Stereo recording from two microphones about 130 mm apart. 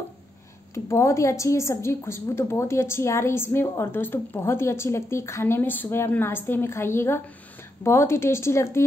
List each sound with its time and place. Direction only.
0.7 s a woman's voice: 20° left (ahead or behind)